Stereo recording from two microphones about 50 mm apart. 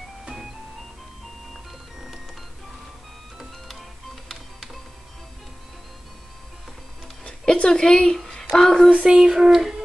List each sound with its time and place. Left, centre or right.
0.2 s music: centre
3.6 s music: centre
7.2 s a sound: centre
8.5 s speech: centre
9.0 s speech: centre